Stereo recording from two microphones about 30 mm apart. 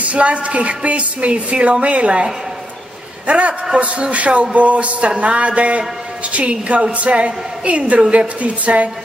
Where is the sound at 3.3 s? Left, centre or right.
Right.